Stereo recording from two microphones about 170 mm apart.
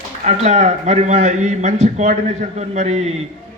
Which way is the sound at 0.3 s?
40° right (ahead or behind).